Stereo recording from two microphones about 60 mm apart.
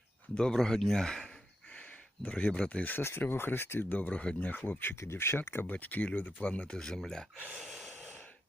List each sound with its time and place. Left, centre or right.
0.3 s speech: centre
1.7 s speech: left
3.0 s speech: left
4.9 s speech: left
5.7 s speech: left; by 7.0 s centre
7.6 s gasp: centre
7.9 s breathing: centre